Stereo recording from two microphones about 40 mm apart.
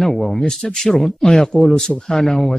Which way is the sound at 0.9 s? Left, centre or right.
Centre.